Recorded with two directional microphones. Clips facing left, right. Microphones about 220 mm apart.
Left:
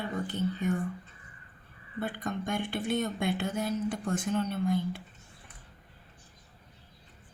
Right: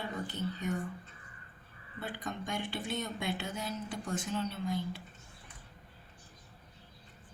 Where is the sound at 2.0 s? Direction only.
55° left (ahead or behind).